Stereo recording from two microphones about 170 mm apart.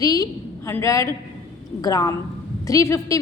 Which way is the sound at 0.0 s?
20° left (ahead or behind).